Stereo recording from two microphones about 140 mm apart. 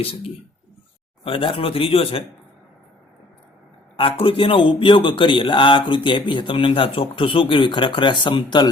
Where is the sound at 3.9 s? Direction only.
40° left (ahead or behind).